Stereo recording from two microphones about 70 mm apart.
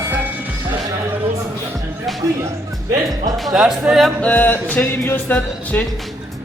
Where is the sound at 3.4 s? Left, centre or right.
Centre.